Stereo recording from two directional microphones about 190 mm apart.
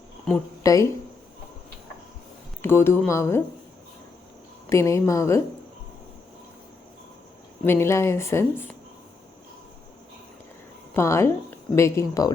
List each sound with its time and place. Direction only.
0.6 s a sound: 15° left (ahead or behind)
2.6 s speech: 10° left (ahead or behind)
4.7 s speech: 15° left (ahead or behind)
7.6 s speech: 10° left (ahead or behind)
10.9 s speech: 15° left (ahead or behind)